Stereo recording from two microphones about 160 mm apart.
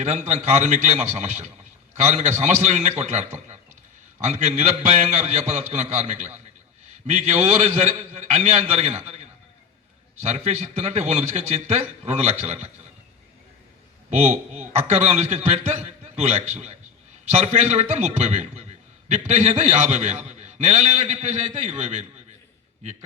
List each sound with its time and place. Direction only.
0.0 s a man's voice: 45° right (ahead or behind)
7.3 s a man's voice: 45° right (ahead or behind)
10.2 s a man's voice: 40° right (ahead or behind)
14.1 s a man's voice: 45° right (ahead or behind)